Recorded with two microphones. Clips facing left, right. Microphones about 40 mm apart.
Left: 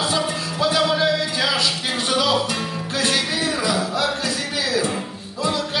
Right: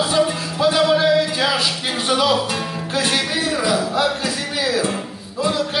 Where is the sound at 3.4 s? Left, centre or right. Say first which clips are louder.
Right 2 dB; centre.